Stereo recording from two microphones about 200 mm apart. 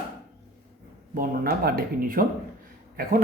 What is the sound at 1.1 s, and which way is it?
Speech, 45° right (ahead or behind).